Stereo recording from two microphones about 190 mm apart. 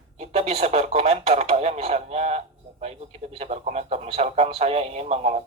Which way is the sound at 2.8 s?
35° right (ahead or behind).